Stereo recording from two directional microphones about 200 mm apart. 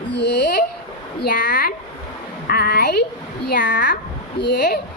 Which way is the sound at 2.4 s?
50° left (ahead or behind).